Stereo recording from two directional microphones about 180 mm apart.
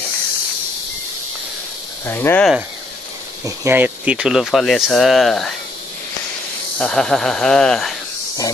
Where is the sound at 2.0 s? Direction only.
15° left (ahead or behind).